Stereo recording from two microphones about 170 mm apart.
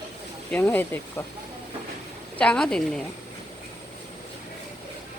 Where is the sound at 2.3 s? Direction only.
5° left (ahead or behind).